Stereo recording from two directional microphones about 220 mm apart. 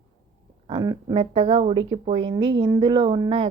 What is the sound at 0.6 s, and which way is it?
Speech, 20° right (ahead or behind).